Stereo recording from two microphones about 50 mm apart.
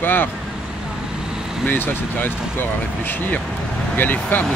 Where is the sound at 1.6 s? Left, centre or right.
Left.